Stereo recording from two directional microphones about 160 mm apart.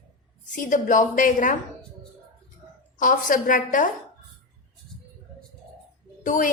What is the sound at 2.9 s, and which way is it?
Speech, 55° left (ahead or behind).